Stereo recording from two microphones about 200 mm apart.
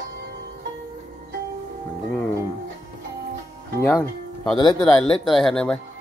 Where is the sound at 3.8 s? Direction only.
10° left (ahead or behind).